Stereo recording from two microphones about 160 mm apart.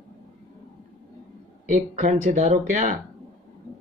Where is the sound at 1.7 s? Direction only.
50° right (ahead or behind).